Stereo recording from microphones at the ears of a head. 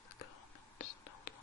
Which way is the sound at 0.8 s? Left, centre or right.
Left.